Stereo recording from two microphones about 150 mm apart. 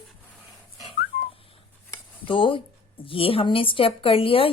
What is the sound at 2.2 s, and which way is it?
A woman's voice, 35° left (ahead or behind).